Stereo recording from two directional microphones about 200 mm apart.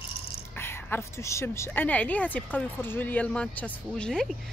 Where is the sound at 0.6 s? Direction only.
10° left (ahead or behind).